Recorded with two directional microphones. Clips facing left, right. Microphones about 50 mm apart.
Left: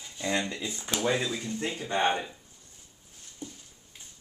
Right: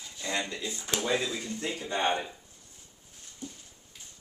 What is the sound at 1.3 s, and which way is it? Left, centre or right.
Speech, centre.